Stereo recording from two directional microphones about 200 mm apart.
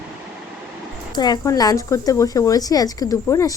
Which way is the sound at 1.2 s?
20° left (ahead or behind).